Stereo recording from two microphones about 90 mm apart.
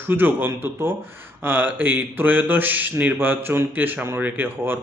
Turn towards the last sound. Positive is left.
turn(degrees=-25)  # may be behind; listen again after turning